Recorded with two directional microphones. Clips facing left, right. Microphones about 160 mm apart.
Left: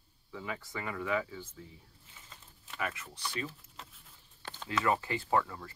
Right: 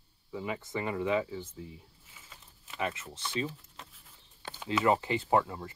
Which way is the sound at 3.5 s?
Centre (ahead or behind).